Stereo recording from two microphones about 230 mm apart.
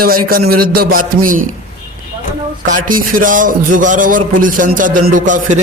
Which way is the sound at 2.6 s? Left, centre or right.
Right.